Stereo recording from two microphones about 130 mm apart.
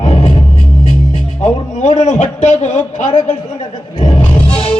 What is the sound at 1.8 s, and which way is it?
A man's voice, 60° left (ahead or behind).